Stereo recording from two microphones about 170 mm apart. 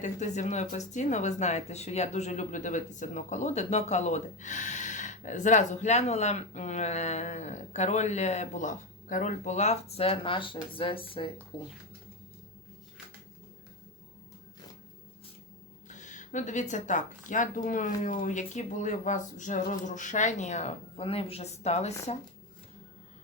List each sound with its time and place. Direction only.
0.0 s speech: 45° left (ahead or behind); by 11.7 s 30° left (ahead or behind)
15.9 s speech: 45° left (ahead or behind)